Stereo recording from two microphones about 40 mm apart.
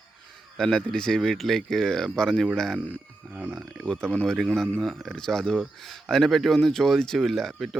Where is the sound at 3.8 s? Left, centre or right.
Centre.